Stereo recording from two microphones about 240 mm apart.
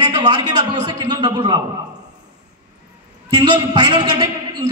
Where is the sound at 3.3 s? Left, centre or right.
Centre.